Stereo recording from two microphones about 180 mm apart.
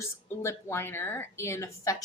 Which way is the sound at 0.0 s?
15° left (ahead or behind).